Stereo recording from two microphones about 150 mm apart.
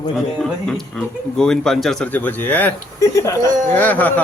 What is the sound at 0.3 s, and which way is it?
Speech, 5° left (ahead or behind).